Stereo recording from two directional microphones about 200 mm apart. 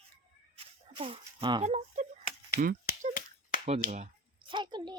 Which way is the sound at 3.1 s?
40° left (ahead or behind).